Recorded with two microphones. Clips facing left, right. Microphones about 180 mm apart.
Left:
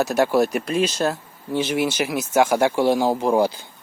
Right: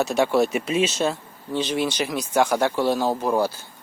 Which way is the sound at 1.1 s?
10° left (ahead or behind).